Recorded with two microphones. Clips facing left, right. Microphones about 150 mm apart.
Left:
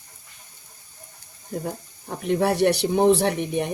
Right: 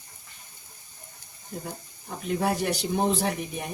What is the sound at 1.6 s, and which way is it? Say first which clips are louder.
Speech: left 7 dB; 60° left (ahead or behind).